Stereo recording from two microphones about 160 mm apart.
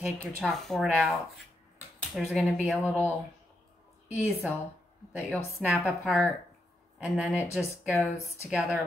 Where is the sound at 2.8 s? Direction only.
15° left (ahead or behind).